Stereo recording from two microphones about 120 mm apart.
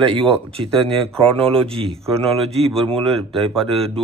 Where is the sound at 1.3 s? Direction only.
50° right (ahead or behind).